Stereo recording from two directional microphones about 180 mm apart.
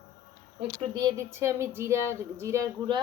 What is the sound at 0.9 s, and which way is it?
Speech, 15° right (ahead or behind).